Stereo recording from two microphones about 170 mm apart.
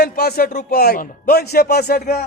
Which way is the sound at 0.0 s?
65° left (ahead or behind).